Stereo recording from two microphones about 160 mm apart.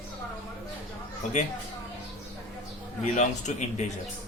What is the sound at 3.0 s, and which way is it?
Speech, 50° left (ahead or behind).